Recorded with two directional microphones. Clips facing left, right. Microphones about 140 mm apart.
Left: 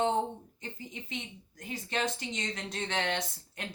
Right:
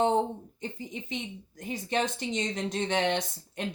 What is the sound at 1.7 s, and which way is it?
A woman's voice, 20° right (ahead or behind).